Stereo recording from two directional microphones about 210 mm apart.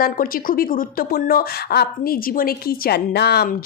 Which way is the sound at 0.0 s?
45° left (ahead or behind).